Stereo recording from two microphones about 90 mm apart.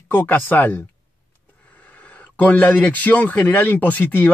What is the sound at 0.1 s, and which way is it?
Speech, 20° left (ahead or behind).